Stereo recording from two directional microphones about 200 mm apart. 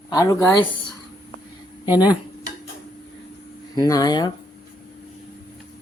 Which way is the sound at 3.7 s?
20° left (ahead or behind).